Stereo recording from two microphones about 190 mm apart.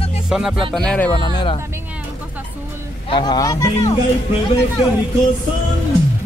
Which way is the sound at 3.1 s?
20° left (ahead or behind).